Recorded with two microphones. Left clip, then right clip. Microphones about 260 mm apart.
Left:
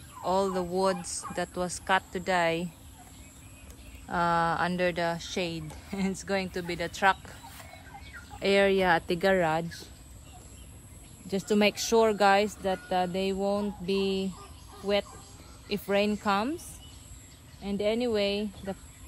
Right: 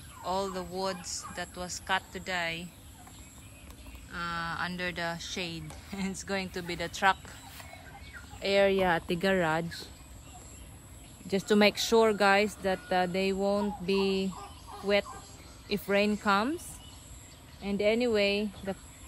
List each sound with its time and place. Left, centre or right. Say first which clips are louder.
0.2 s speech: left 5 dB; centre
4.1 s speech: left 9 dB; centre
8.4 s speech: left 2 dB; left
9.0 s speech: left 3 dB; centre
11.2 s speech: right 1 dB; centre
15.7 s speech: left 1 dB; centre
17.6 s speech: right 1 dB; centre